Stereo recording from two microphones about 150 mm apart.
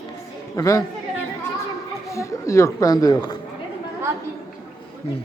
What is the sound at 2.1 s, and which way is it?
Speech, 20° left (ahead or behind).